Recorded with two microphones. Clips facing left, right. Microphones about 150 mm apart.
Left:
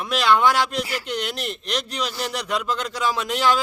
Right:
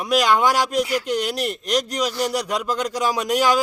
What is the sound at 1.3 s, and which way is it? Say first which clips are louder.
Speech: right 5 dB; 40° right (ahead or behind).